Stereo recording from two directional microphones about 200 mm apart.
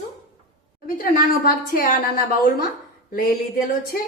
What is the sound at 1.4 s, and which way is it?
Speech, 45° left (ahead or behind).